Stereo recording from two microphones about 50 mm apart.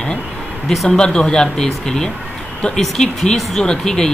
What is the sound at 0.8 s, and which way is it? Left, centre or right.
Speech, centre.